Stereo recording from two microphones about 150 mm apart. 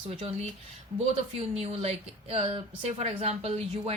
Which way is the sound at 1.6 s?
40° right (ahead or behind).